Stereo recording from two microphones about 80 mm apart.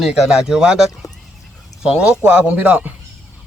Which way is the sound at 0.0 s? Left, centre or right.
Centre.